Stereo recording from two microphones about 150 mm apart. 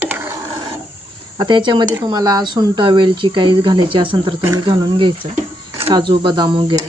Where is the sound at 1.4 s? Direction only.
30° right (ahead or behind).